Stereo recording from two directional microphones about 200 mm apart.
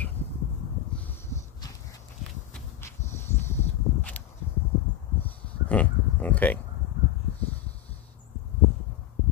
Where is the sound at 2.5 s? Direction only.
15° left (ahead or behind).